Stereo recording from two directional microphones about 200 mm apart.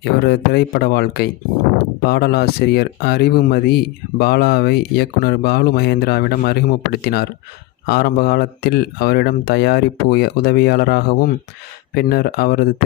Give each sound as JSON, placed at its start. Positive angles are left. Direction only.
{"t": 0.0, "sound": "speech", "side_deg": 55}